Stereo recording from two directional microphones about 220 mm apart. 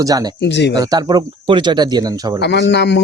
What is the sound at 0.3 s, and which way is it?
Speech, 50° left (ahead or behind).